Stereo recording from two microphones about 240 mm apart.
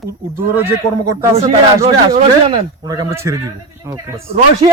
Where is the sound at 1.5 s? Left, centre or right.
Right.